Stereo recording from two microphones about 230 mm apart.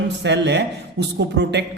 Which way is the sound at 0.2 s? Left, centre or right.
Right.